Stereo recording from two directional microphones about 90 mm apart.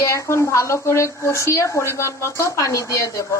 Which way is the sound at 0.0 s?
35° left (ahead or behind).